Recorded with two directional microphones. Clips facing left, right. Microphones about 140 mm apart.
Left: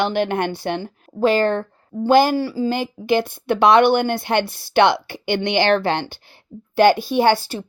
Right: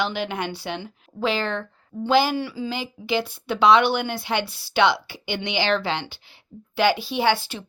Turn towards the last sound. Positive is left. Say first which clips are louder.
# left 5 dB
turn(degrees=40)  # may be behind; listen again after turning